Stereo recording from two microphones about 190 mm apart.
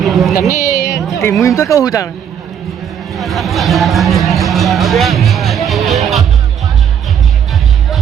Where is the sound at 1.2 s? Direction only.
15° left (ahead or behind).